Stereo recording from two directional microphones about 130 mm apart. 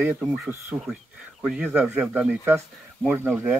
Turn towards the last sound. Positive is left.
turn(degrees=-10)  # may be behind; listen again after turning